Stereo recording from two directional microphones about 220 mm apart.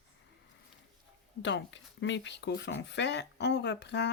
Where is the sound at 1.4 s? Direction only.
55° left (ahead or behind).